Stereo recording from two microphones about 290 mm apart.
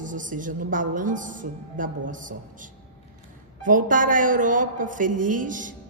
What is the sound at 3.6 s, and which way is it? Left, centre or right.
A woman's voice, right.